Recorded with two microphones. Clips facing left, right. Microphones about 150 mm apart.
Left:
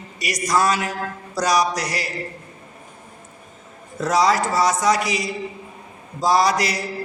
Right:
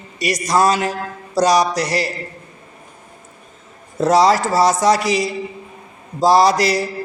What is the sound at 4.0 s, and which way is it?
A man's voice, 30° right (ahead or behind).